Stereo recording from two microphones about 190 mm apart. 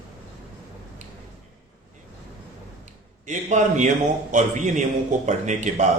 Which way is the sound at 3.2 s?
40° right (ahead or behind).